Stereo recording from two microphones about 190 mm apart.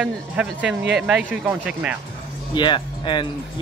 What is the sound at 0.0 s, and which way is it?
Speech, 5° right (ahead or behind).